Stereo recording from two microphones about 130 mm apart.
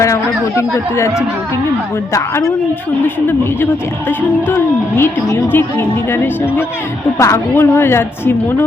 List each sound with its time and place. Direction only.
0.0 s speech: 25° left (ahead or behind)
4.4 s a woman's voice: 15° left (ahead or behind)